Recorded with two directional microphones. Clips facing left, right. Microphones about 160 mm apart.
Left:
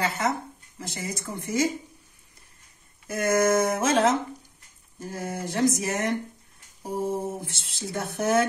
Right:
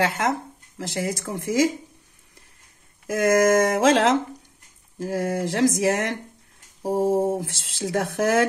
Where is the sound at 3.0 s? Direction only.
90° right.